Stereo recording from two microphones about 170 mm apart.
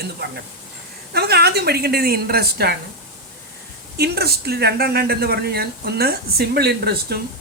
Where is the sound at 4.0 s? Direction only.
70° right (ahead or behind).